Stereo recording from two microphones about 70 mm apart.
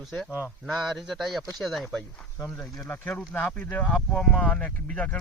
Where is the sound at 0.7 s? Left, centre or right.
Centre.